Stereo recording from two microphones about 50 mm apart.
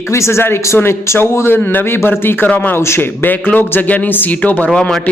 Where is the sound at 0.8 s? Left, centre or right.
Left.